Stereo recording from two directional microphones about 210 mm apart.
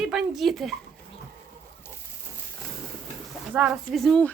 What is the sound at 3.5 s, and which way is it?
Speech, 5° right (ahead or behind).